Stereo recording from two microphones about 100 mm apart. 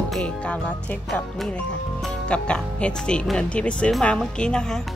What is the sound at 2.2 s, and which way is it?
Speech, 10° left (ahead or behind).